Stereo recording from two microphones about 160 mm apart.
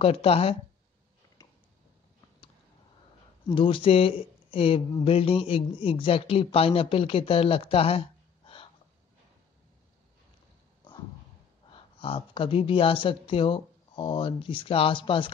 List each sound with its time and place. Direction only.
0.0 s speech: 40° left (ahead or behind)
1.4 s a sound: 20° left (ahead or behind)
3.4 s speech: 30° left (ahead or behind)
11.7 s speech: 35° left (ahead or behind)